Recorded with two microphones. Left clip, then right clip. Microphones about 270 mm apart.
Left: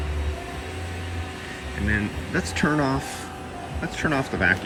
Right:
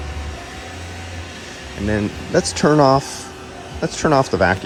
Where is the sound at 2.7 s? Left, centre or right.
Left.